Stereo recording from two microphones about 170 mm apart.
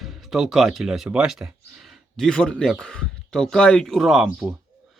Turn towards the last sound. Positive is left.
turn(degrees=0)  # may be behind; listen again after turning